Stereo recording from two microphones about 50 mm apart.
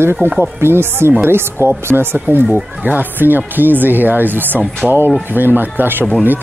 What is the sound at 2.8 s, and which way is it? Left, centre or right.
Speech, right.